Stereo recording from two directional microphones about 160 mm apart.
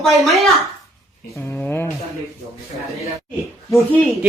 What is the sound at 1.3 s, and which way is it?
Speech, 15° left (ahead or behind).